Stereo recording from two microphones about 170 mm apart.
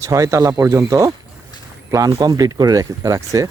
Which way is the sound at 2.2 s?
20° right (ahead or behind).